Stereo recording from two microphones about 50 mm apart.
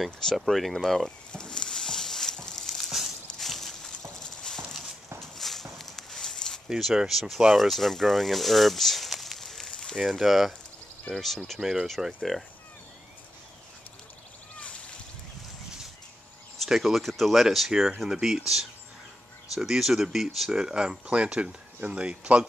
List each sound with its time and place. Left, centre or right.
0.2 s speech: centre
1.3 s a sound: centre
2.6 s a sound: centre
4.2 s horse: centre
5.2 s a sound: centre
6.7 s speech: centre
9.9 s speech: centre
11.6 s speech: centre
16.5 s speech: centre; by 22.5 s right